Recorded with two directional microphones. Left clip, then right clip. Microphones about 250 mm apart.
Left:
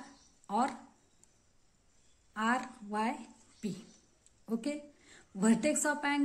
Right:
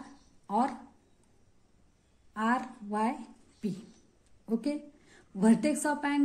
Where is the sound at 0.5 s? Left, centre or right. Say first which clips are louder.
Right 3 dB; centre.